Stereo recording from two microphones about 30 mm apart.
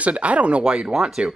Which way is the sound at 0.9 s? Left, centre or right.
Centre.